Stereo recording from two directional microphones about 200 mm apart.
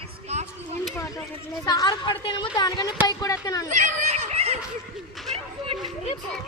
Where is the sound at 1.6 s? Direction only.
20° left (ahead or behind).